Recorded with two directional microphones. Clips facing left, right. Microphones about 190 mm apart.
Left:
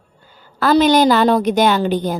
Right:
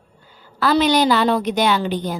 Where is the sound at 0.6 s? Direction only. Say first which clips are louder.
Left 4 dB; 45° left (ahead or behind).